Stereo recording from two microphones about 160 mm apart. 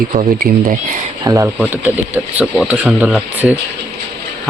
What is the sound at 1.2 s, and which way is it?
Speech, 20° right (ahead or behind).